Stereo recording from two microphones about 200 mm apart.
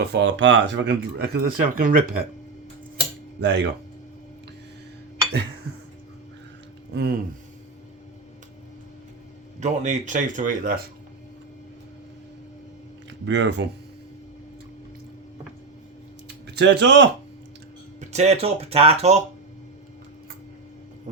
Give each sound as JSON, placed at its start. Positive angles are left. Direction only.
{"t": 0.0, "sound": "speech", "side_deg": -60}
{"t": 3.4, "sound": "speech", "side_deg": -60}
{"t": 6.9, "sound": "speech", "side_deg": -50}
{"t": 9.6, "sound": "speech", "side_deg": -35}
{"t": 13.2, "sound": "speech", "side_deg": -60}
{"t": 16.6, "sound": "speech", "side_deg": -60}
{"t": 18.0, "sound": "speech", "side_deg": -35}